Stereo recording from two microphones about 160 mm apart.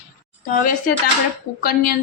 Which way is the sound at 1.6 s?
75° left (ahead or behind).